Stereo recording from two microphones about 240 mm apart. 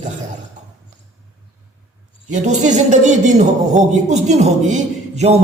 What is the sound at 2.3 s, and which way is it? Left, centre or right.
A man's voice, right.